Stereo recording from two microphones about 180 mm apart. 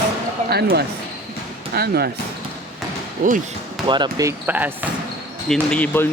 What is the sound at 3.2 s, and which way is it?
Speech, 50° right (ahead or behind).